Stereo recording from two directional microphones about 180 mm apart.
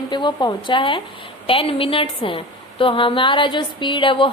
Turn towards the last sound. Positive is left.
turn(degrees=30)  # may be behind; listen again after turning